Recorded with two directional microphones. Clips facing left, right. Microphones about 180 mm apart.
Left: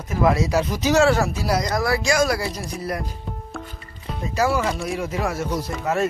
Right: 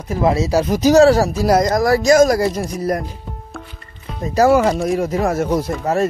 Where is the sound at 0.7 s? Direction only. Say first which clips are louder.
Right 9 dB; 40° right (ahead or behind).